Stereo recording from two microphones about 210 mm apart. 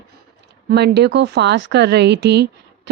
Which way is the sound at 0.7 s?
50° right (ahead or behind).